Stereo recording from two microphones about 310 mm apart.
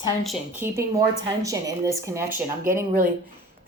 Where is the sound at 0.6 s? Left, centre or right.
Centre.